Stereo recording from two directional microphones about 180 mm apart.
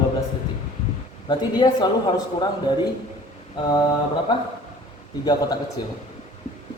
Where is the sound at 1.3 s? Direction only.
25° left (ahead or behind).